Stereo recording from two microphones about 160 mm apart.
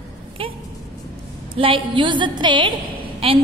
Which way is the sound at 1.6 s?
30° right (ahead or behind).